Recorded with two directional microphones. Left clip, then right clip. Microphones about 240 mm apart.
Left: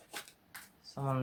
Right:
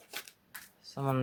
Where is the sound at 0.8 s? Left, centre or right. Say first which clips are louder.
Right 4 dB; right.